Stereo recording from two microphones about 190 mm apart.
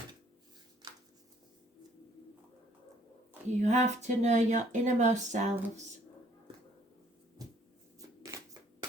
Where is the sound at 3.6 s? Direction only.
35° right (ahead or behind).